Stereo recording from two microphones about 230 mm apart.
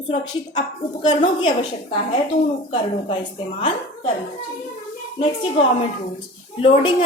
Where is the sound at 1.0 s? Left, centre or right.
Left.